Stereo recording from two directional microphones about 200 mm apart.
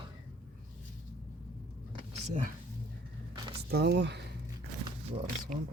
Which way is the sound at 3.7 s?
55° right (ahead or behind).